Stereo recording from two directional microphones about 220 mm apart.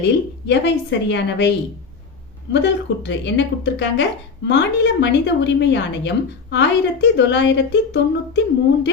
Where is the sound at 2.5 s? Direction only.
55° left (ahead or behind).